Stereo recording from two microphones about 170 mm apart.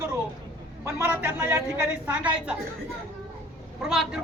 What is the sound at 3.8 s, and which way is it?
Speech, 5° right (ahead or behind).